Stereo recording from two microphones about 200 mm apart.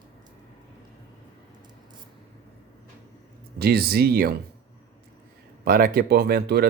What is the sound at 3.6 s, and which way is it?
Speech, 50° right (ahead or behind).